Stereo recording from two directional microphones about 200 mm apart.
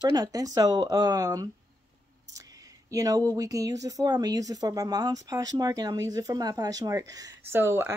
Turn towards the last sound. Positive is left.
turn(degrees=-10)  # may be behind; listen again after turning